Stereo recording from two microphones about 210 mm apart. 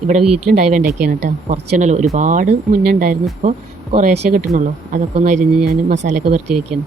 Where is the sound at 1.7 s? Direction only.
35° right (ahead or behind).